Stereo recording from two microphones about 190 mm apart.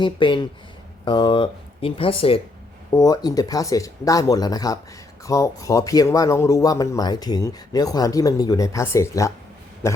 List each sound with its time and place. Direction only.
0.0 s speech: 25° left (ahead or behind)
2.9 s a man's voice: 20° left (ahead or behind)